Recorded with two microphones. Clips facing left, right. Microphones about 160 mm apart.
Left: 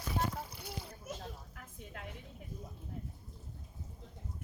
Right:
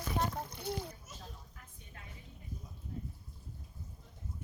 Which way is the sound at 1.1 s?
70° left (ahead or behind).